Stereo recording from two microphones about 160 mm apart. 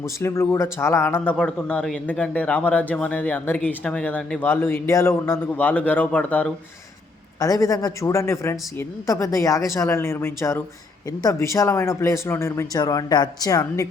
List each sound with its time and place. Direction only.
0.2 s a man's voice: 15° left (ahead or behind)
7.3 s a man's voice: 20° left (ahead or behind)